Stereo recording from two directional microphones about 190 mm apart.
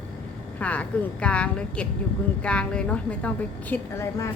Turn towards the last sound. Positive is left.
turn(degrees=15)  # may be behind; listen again after turning